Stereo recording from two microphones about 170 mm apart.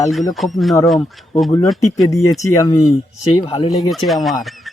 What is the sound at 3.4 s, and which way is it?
Speech, 30° left (ahead or behind).